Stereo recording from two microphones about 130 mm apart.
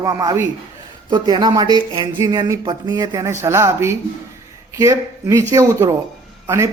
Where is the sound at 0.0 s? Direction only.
25° right (ahead or behind).